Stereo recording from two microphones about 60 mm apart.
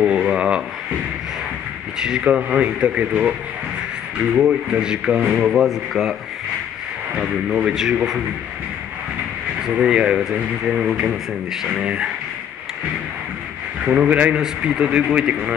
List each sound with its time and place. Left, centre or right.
0.0 s a sound: centre
2.0 s speech: centre
4.4 s speech: centre
7.2 s speech: centre
9.6 s speech: centre
13.8 s speech: right